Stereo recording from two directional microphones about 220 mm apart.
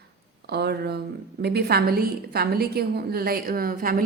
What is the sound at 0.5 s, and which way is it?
A woman's voice, 50° right (ahead or behind).